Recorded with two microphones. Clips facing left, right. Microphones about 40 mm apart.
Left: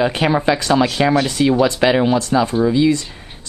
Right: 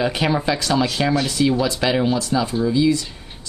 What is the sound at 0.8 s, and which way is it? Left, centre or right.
Speech, left.